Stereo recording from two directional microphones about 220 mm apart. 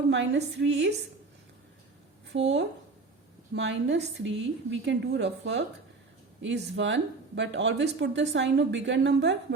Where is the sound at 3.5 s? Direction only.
55° right (ahead or behind).